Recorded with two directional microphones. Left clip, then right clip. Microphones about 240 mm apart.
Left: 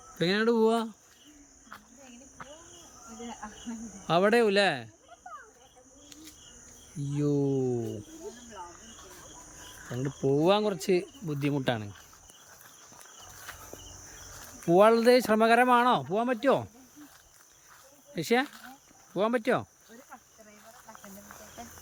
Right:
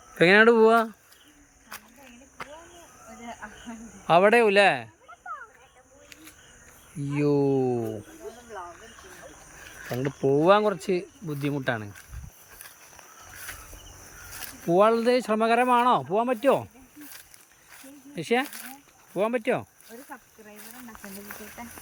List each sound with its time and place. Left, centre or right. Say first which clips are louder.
0.2 s speech: right 9 dB; centre
3.4 s speech: right 1 dB; centre
7.3 s speech: right 5 dB; right
9.9 s speech: right 4 dB; centre
14.7 s speech: even; centre
18.1 s speech: right 1 dB; centre
18.4 s speech: right 4 dB; right
19.1 s speech: right 2 dB; centre
20.6 s snake: right 5 dB; right